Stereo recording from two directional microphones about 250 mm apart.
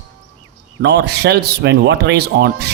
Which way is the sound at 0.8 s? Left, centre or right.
Right.